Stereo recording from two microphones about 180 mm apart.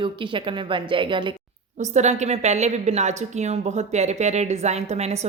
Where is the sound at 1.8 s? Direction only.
40° right (ahead or behind).